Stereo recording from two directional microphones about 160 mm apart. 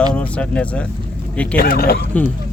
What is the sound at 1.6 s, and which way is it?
Speech, 75° left (ahead or behind).